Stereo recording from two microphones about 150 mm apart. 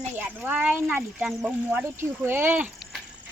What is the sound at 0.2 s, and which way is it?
Speech, 10° right (ahead or behind).